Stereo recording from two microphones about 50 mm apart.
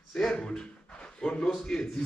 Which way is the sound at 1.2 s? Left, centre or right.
Centre.